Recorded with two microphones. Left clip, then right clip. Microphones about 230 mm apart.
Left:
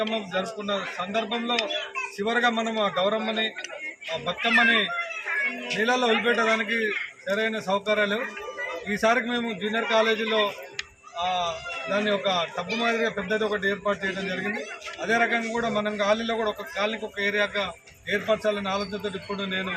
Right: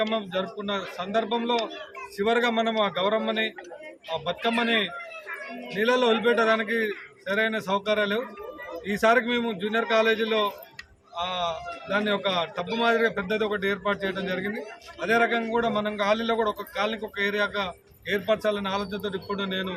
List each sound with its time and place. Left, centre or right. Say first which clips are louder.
0.0 s a man's voice: even; centre
4.6 s a man's voice: left 3 dB; centre
5.6 s a man's voice: right 3 dB; right